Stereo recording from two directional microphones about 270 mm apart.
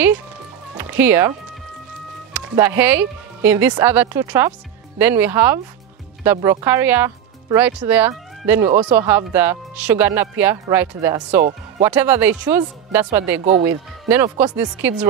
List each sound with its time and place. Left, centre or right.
0.7 s speech: centre
2.3 s speech: centre